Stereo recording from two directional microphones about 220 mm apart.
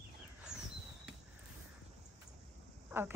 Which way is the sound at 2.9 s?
10° right (ahead or behind).